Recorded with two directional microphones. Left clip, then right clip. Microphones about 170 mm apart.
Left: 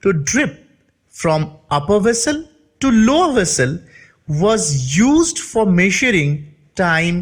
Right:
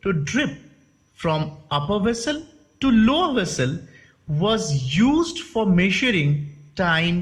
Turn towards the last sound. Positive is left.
turn(degrees=40)  # may be behind; listen again after turning